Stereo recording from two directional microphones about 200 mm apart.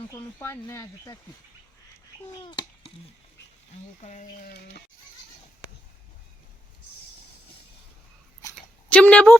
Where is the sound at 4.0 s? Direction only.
35° left (ahead or behind).